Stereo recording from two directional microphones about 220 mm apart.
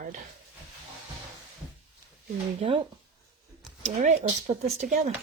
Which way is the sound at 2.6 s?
25° right (ahead or behind).